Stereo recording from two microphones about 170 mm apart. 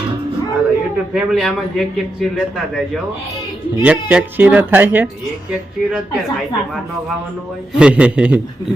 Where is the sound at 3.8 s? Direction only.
10° right (ahead or behind).